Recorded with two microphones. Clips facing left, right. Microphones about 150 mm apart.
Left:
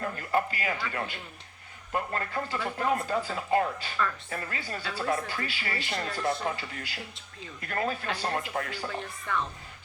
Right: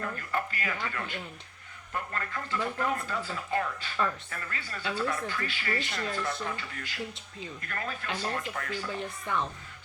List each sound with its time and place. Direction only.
0.2 s speech: 30° left (ahead or behind)
9.3 s speech: 20° right (ahead or behind)